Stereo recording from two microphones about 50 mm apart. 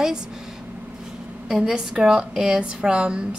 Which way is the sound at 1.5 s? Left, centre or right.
Centre.